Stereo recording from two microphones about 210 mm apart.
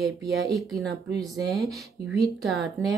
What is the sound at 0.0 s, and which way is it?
A woman's voice, centre (ahead or behind).